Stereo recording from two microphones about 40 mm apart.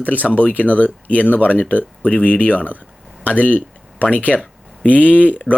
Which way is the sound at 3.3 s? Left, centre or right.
Left.